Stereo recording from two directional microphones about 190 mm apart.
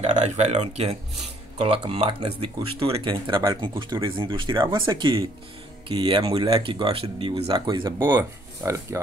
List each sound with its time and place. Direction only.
0.0 s speech: 35° right (ahead or behind); by 9.0 s 15° right (ahead or behind)